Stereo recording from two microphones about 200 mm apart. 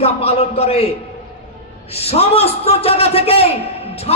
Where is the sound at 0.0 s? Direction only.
30° left (ahead or behind).